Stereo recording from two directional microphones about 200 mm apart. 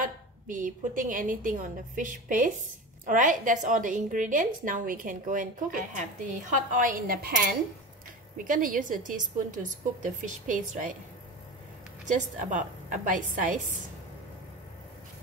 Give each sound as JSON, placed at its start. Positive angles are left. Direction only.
{"t": 0.0, "sound": "a woman's voice", "side_deg": -40}
{"t": 12.1, "sound": "a woman's voice", "side_deg": -40}